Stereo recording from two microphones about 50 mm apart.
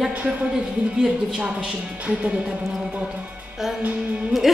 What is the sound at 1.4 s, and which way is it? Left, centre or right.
Speech, right.